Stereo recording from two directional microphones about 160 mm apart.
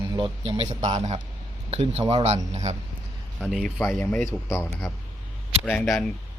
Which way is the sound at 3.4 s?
Centre (ahead or behind).